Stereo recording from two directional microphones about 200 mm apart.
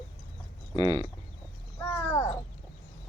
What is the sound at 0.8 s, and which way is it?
Speech, 20° right (ahead or behind).